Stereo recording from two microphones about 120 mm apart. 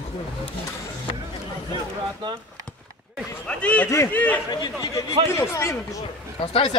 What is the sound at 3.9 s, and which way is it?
Speech, 25° left (ahead or behind).